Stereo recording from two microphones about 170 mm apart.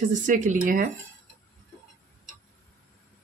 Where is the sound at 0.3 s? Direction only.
50° right (ahead or behind).